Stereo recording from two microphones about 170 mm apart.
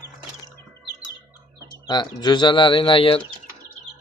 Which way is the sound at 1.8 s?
25° left (ahead or behind).